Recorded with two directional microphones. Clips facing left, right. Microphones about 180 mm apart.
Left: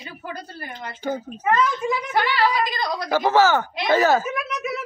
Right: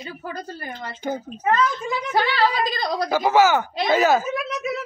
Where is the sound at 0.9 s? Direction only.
15° right (ahead or behind).